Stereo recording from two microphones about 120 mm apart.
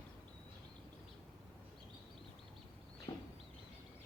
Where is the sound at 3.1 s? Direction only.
35° left (ahead or behind).